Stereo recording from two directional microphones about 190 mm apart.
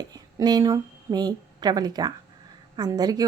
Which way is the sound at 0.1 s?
20° right (ahead or behind).